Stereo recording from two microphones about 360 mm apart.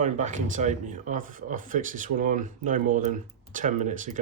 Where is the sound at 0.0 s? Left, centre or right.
Centre.